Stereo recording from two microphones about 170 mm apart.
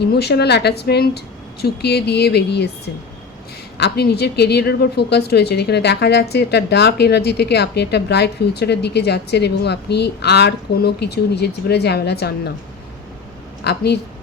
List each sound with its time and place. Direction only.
0.0 s a woman's voice: 75° left (ahead or behind)
3.8 s a woman's voice: 75° left (ahead or behind)
13.7 s a woman's voice: 75° left (ahead or behind)